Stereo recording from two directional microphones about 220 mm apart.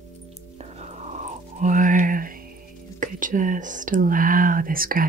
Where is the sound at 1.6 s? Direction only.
35° right (ahead or behind).